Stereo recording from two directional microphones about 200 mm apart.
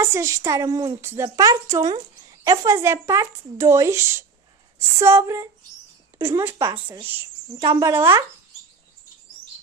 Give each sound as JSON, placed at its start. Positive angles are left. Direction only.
{"t": 0.0, "sound": "a woman's voice", "side_deg": -15}